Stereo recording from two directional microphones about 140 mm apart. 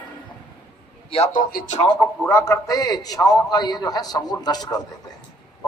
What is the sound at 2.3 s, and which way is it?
A man's voice, 20° left (ahead or behind).